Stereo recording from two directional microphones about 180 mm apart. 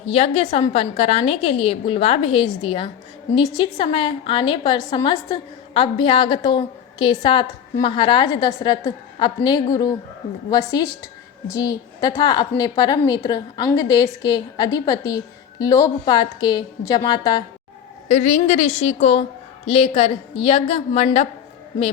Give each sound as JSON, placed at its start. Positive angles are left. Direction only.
{"t": 0.0, "sound": "a woman's voice", "side_deg": 30}
{"t": 18.1, "sound": "a woman's voice", "side_deg": 40}